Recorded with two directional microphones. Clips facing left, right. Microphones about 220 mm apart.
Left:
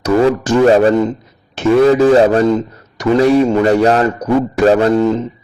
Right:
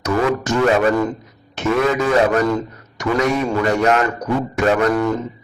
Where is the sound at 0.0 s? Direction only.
30° left (ahead or behind).